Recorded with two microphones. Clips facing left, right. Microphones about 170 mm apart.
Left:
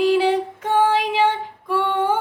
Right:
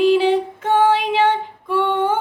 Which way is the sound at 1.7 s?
10° left (ahead or behind).